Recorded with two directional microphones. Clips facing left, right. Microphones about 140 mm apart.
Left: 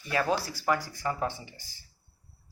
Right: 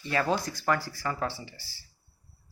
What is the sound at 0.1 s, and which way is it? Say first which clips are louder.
Speech: even; 10° left (ahead or behind).